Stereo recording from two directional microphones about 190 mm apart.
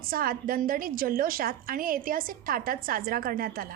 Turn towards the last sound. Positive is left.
turn(degrees=-50)  # may be behind; listen again after turning